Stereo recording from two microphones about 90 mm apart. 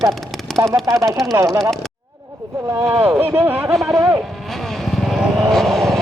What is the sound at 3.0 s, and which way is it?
Speech, 25° right (ahead or behind).